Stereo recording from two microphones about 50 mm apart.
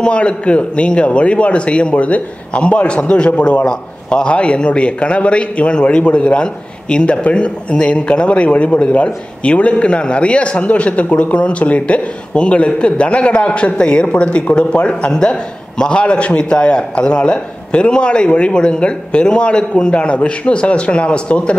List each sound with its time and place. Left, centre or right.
0.0 s a man's voice: left